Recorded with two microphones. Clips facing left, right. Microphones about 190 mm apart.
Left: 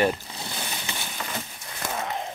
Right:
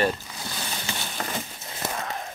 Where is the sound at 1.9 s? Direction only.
20° left (ahead or behind).